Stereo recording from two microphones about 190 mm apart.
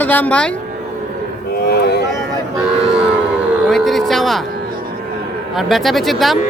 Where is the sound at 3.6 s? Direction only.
Centre (ahead or behind).